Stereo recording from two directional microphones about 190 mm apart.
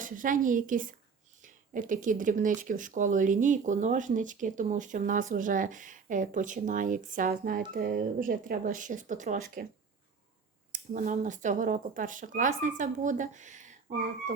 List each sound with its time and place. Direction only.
0.0 s speech: 45° right (ahead or behind)
10.7 s speech: 45° right (ahead or behind)